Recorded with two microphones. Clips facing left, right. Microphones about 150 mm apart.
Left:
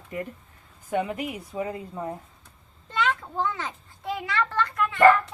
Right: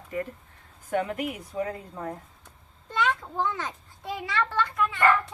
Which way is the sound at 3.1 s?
Centre (ahead or behind).